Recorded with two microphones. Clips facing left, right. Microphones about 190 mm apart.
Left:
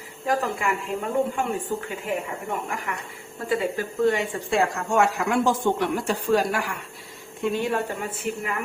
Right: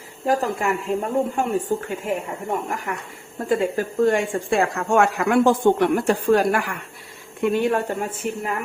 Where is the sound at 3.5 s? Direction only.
45° right (ahead or behind).